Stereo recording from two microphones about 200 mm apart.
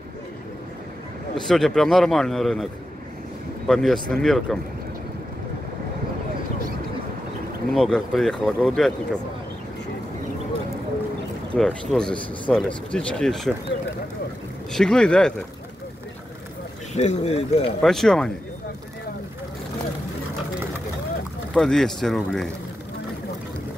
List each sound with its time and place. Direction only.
1.5 s speech: centre (ahead or behind)
7.7 s speech: centre (ahead or behind)
11.5 s speech: centre (ahead or behind)
14.7 s speech: 5° left (ahead or behind)
16.9 s speech: 35° left (ahead or behind)
17.8 s speech: centre (ahead or behind)
21.5 s speech: centre (ahead or behind)